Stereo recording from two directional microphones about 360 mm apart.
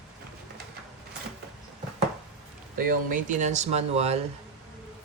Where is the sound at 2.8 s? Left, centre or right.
Right.